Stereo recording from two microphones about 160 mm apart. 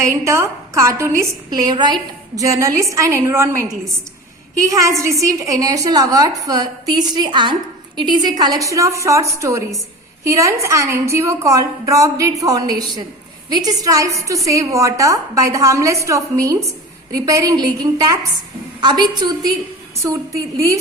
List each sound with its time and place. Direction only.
0.3 s a woman's voice: 20° right (ahead or behind)